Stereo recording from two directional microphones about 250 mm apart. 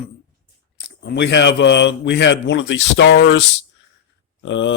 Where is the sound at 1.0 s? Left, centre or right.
Left.